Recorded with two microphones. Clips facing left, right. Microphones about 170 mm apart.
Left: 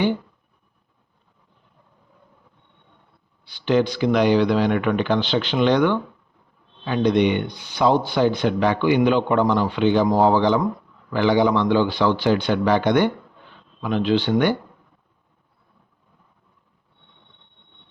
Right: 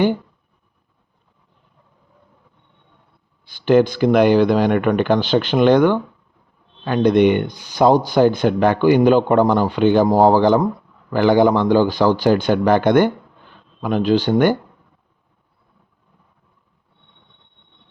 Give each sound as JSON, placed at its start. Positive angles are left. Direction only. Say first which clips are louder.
{"t": 3.4, "sound": "speech", "louder": "right 5 dB", "side_deg": -50}